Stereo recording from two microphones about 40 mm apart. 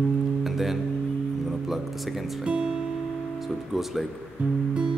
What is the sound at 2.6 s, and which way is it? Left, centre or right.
Music, centre.